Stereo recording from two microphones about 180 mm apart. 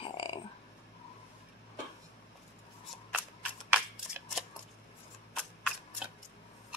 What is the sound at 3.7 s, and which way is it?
Shuffling cards, 5° right (ahead or behind).